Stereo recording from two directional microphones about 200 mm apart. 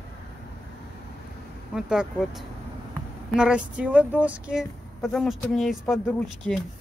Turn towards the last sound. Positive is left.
turn(degrees=0)  # may be behind; listen again after turning